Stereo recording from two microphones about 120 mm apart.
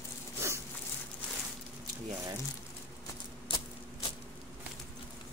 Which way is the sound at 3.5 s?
45° left (ahead or behind).